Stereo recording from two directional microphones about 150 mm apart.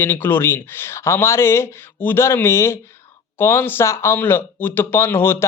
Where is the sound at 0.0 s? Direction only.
15° left (ahead or behind).